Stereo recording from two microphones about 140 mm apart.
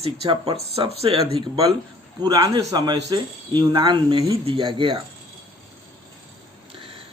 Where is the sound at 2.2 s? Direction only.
30° right (ahead or behind).